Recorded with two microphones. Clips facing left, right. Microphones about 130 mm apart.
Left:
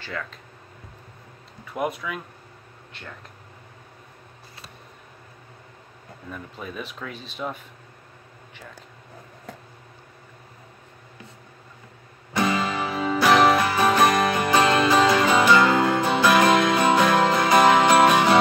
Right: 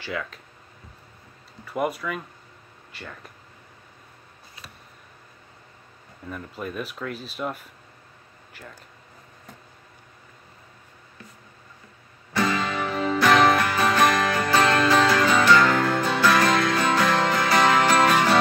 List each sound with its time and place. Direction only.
0.0 s speech: 5° right (ahead or behind)
1.7 s speech: centre (ahead or behind)
6.3 s speech: centre (ahead or behind)
12.4 s music: 15° left (ahead or behind)